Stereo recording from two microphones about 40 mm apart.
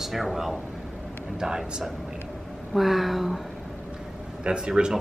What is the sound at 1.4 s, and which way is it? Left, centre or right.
Speech, centre.